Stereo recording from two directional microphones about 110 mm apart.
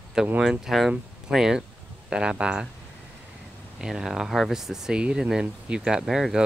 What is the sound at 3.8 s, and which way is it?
Speech, 5° right (ahead or behind).